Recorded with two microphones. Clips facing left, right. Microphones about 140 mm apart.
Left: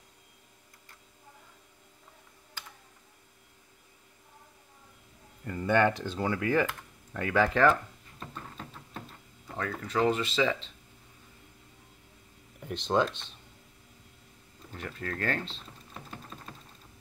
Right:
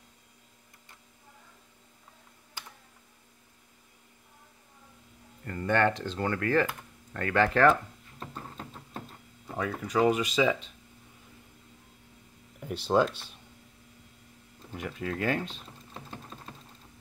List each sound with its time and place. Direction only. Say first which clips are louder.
5.4 s speech: left 1 dB; 10° left (ahead or behind)
8.4 s a sound: right 1 dB; 35° right (ahead or behind)
9.6 s speech: right 2 dB; 15° right (ahead or behind)
12.5 s speech: right 2 dB; 5° right (ahead or behind)
14.7 s typing: right 3 dB; 10° right (ahead or behind)